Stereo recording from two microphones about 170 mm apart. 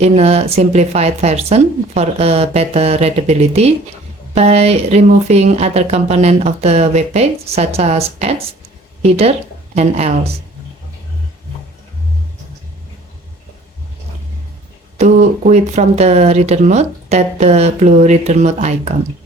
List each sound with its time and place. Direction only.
0.0 s speech: 40° right (ahead or behind)
14.9 s speech: 40° right (ahead or behind)